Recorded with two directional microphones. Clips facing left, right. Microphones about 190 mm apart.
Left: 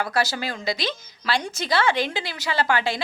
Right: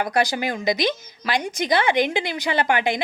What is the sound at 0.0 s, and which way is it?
Speech, 20° right (ahead or behind).